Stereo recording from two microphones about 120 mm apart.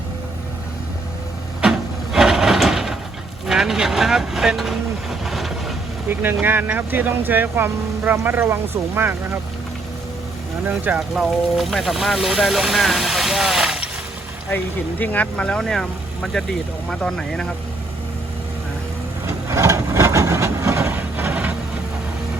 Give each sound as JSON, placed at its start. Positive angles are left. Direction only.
{"t": 2.1, "sound": "a sound", "side_deg": -5}
{"t": 3.4, "sound": "vehicle", "side_deg": -5}
{"t": 6.4, "sound": "speech", "side_deg": -15}
{"t": 10.7, "sound": "speech", "side_deg": -15}
{"t": 11.1, "sound": "speech", "side_deg": 0}
{"t": 14.5, "sound": "speech", "side_deg": 15}
{"t": 19.5, "sound": "vehicle", "side_deg": -25}